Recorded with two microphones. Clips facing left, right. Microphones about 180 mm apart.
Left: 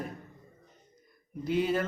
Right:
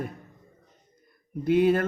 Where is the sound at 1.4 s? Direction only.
55° right (ahead or behind).